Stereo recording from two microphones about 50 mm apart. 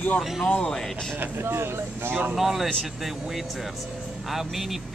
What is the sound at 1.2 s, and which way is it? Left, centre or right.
Speech, right.